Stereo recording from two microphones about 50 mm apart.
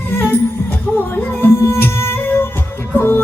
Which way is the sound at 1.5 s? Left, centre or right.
Left.